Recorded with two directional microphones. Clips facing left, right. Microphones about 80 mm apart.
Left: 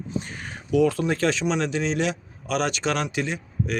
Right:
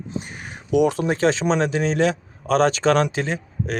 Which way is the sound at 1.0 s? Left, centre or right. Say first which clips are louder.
Right 3 dB; right.